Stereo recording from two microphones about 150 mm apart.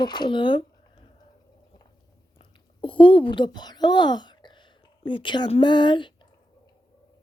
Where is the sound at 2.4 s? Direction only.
35° left (ahead or behind).